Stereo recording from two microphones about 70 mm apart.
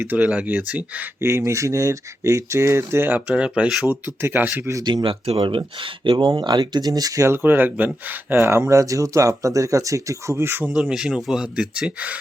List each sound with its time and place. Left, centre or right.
0.2 s speech: centre
1.2 s speech: right
3.2 s speech: centre
3.8 s speech: right
4.8 s speech: right
6.1 s speech: right
7.3 s speech: right
8.4 s speech: right
10.3 s speech: right
10.7 s speech: centre